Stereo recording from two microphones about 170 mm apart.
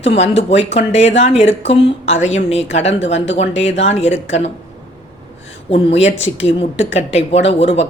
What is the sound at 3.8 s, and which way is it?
Speech, 40° left (ahead or behind).